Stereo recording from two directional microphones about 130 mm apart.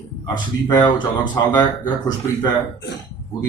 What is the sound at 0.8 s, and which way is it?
Speech, 35° left (ahead or behind).